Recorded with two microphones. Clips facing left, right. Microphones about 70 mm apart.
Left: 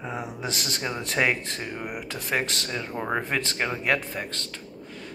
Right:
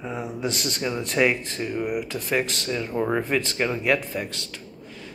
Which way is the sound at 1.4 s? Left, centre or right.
Left.